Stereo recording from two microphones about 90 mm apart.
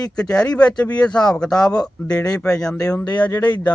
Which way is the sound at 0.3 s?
15° left (ahead or behind).